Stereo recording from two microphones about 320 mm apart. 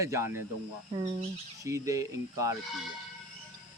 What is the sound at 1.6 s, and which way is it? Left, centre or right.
Speech, centre.